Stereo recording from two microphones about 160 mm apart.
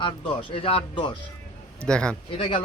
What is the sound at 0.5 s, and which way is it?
Speech, 35° left (ahead or behind).